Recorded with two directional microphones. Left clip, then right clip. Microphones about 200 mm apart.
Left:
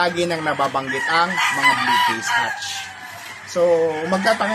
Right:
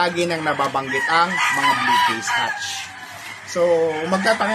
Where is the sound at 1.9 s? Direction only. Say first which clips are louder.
Even; 50° left (ahead or behind).